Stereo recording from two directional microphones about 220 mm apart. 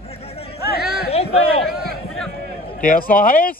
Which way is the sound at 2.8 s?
40° left (ahead or behind).